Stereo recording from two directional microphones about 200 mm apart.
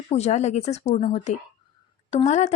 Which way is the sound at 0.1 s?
35° left (ahead or behind).